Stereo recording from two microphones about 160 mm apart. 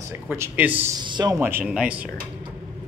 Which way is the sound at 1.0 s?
25° right (ahead or behind).